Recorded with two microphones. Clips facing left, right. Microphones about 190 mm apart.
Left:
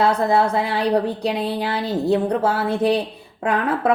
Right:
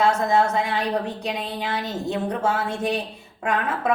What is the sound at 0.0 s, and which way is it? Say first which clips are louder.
Speech: left 2 dB; 35° left (ahead or behind).